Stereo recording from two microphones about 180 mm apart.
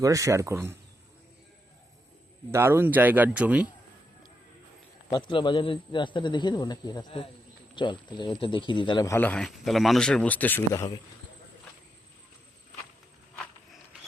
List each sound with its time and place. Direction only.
0.0 s speech: 20° right (ahead or behind)
2.5 s speech: 15° right (ahead or behind)
5.0 s a man's voice: 25° left (ahead or behind)
9.1 s speech: 10° left (ahead or behind)